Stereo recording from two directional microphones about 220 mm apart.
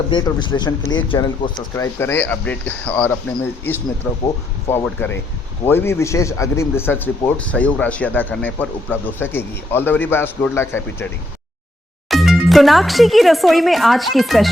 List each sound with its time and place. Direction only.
0.1 s speech: 20° left (ahead or behind)
1.7 s a man's voice: 10° left (ahead or behind)
12.1 s speech: centre (ahead or behind)